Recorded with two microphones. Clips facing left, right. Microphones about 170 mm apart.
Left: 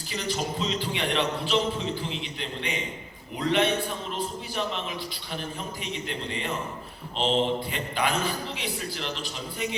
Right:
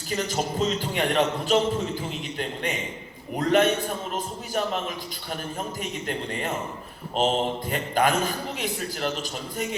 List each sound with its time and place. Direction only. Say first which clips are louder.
0.1 s a man's voice: right 3 dB; 45° right (ahead or behind)